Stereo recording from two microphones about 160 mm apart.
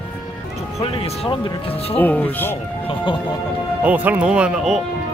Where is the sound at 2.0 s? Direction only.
10° left (ahead or behind).